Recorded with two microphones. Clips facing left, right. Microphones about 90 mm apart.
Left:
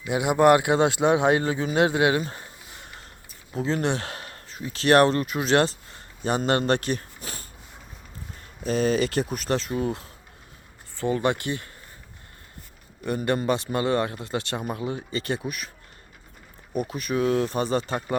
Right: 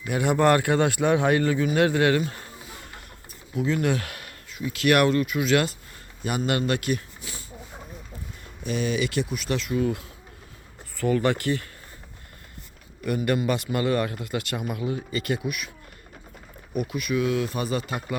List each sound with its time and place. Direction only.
0.0 s speech: 15° left (ahead or behind)
2.2 s a sound: 25° left (ahead or behind)
3.5 s a man's voice: 35° left (ahead or behind)
8.6 s speech: 40° left (ahead or behind)
10.9 s speech: 25° left (ahead or behind)
13.3 s speech: 25° left (ahead or behind)
16.7 s speech: 35° left (ahead or behind)